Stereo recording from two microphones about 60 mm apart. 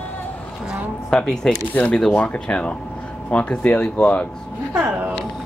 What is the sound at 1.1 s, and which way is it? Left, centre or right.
Speech, centre.